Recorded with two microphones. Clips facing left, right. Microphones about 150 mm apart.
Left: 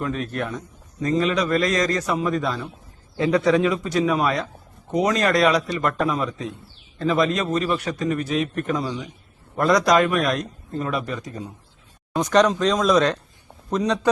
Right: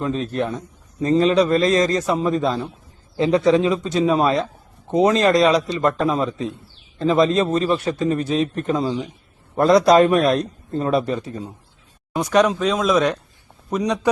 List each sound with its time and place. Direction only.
0.0 s a man's voice: 25° right (ahead or behind)
12.1 s speech: 10° right (ahead or behind)